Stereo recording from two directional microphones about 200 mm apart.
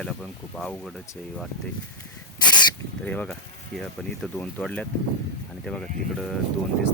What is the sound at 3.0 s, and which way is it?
Speech, 5° left (ahead or behind).